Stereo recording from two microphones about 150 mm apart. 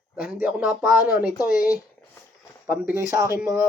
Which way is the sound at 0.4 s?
5° right (ahead or behind).